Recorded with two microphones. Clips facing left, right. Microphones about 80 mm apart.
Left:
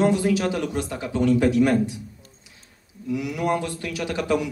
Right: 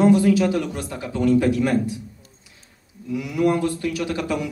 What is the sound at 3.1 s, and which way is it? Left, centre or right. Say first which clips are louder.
A man's voice: right 3 dB; left.